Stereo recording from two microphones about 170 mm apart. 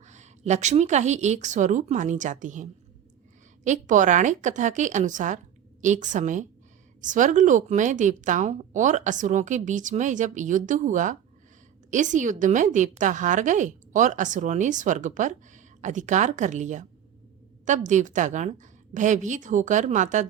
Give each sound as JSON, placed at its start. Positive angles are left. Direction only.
{"t": 0.0, "sound": "a woman's voice", "side_deg": -45}